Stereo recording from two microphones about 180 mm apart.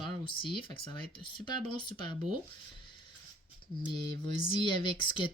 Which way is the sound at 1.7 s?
25° left (ahead or behind).